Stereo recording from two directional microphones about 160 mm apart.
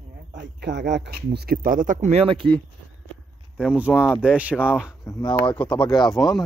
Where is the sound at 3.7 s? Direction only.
10° right (ahead or behind).